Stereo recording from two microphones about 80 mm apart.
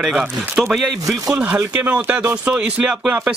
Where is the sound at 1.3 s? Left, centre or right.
Centre.